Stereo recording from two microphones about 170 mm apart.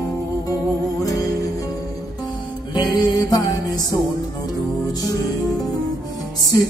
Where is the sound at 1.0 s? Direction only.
20° left (ahead or behind).